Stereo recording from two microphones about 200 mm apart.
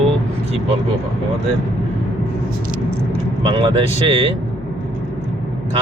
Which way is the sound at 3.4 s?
25° right (ahead or behind).